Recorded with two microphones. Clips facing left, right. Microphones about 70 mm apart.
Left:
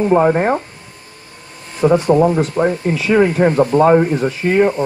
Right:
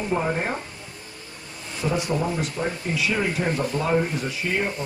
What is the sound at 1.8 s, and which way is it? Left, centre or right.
Speech, left.